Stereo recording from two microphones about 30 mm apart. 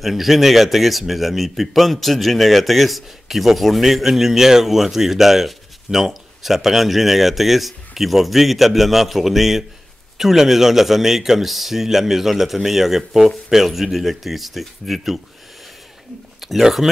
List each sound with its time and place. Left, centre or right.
0.0 s a man's voice: centre
16.6 s a man's voice: centre